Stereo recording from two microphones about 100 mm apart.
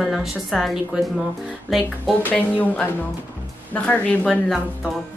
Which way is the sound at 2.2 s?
15° left (ahead or behind).